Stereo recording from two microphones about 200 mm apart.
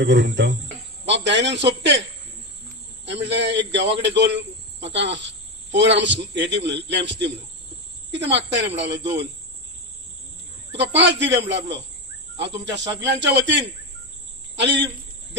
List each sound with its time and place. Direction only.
0.0 s a man's voice: 60° right (ahead or behind)
3.1 s a man's voice: 60° right (ahead or behind)
10.7 s a man's voice: 60° right (ahead or behind)
13.0 s a man's voice: 60° right (ahead or behind)
14.6 s a man's voice: 60° right (ahead or behind)